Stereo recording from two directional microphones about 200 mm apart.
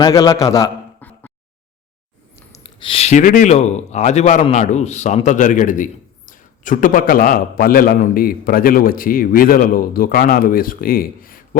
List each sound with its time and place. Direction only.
0.0 s a man's voice: 20° left (ahead or behind)
2.6 s speech: 25° left (ahead or behind); by 11.4 s 45° left (ahead or behind)